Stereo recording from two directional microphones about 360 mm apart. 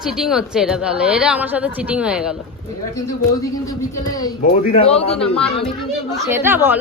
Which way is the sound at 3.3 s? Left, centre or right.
Centre.